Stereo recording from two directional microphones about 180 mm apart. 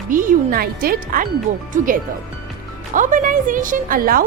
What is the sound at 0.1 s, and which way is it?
A woman's voice, 50° right (ahead or behind).